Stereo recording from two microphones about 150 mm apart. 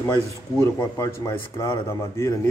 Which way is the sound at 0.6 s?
20° left (ahead or behind).